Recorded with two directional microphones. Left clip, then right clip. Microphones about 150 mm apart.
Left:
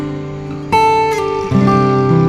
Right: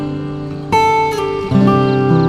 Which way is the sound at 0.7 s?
Centre (ahead or behind).